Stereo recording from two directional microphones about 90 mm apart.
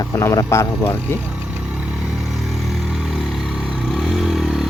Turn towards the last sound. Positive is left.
turn(degrees=0)  # may be behind; listen again after turning